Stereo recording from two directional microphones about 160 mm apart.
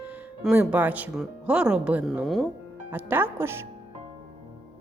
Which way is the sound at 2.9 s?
10° right (ahead or behind).